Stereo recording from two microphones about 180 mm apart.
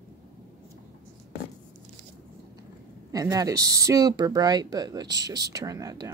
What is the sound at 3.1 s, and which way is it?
Speech, 20° right (ahead or behind).